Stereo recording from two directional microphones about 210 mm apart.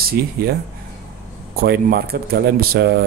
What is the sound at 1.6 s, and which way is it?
Speech, 45° right (ahead or behind).